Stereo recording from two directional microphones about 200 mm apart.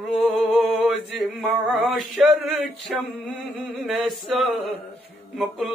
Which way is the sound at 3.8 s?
Centre (ahead or behind).